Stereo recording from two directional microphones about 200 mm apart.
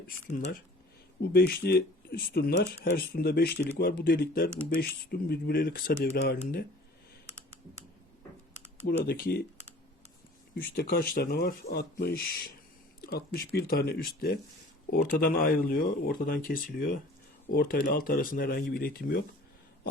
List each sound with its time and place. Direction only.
0.3 s speech: 40° left (ahead or behind)
1.2 s speech: 50° left (ahead or behind)
8.9 s speech: 50° left (ahead or behind)
10.8 s speech: 50° left (ahead or behind)